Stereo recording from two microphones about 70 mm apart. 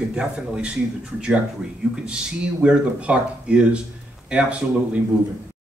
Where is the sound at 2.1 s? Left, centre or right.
Centre.